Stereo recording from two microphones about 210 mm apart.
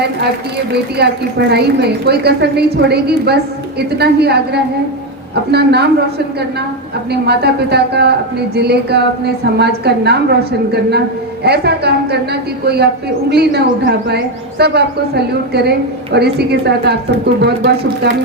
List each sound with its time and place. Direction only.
0.7 s a woman's voice: 50° right (ahead or behind)